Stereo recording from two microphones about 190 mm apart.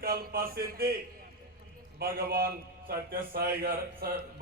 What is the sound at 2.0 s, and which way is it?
A man's voice, 50° right (ahead or behind).